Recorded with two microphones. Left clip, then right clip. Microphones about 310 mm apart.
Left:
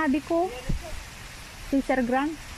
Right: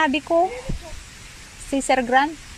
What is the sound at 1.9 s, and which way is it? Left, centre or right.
Speech, right.